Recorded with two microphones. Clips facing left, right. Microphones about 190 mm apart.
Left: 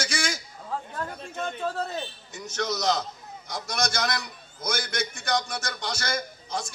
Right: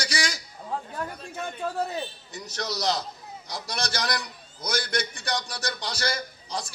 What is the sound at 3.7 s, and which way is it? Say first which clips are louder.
A man's voice: left 2 dB; 50° left (ahead or behind).